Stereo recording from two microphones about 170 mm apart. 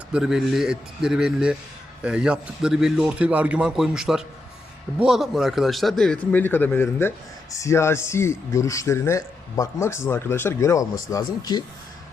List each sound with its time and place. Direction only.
0.1 s a man's voice: 5° right (ahead or behind); by 11.6 s 25° left (ahead or behind)